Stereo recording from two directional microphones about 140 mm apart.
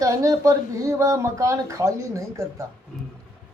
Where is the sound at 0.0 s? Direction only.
25° right (ahead or behind).